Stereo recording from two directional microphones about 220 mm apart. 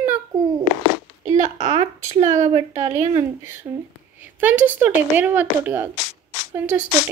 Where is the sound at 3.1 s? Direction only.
10° right (ahead or behind).